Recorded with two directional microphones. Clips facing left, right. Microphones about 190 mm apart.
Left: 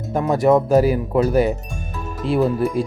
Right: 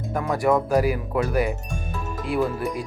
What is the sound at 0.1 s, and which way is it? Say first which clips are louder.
Speech: left 6 dB; 25° left (ahead or behind).